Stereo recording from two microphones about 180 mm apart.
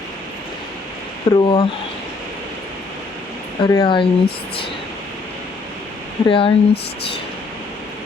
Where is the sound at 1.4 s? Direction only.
25° left (ahead or behind).